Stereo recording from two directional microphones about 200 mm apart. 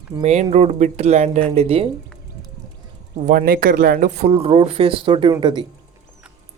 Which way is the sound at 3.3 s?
45° right (ahead or behind).